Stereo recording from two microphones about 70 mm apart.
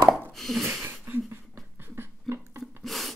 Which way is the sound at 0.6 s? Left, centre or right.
Right.